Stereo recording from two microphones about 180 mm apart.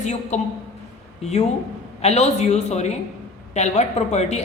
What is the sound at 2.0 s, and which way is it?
A woman's voice, 35° left (ahead or behind).